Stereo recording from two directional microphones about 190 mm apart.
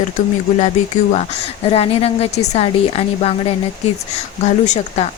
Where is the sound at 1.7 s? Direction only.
30° left (ahead or behind).